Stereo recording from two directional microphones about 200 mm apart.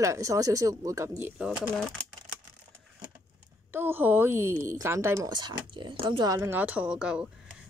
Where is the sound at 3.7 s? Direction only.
10° right (ahead or behind).